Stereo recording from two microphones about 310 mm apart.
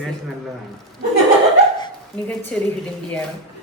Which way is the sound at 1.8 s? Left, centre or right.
Centre.